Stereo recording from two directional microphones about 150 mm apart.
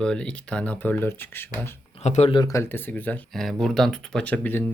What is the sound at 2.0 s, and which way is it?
Speech, 45° left (ahead or behind).